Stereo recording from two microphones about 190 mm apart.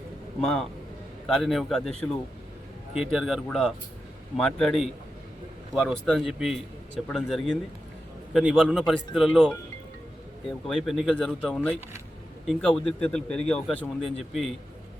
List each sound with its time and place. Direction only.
0.4 s a man's voice: 5° left (ahead or behind)
2.9 s a man's voice: centre (ahead or behind)
10.7 s a man's voice: centre (ahead or behind)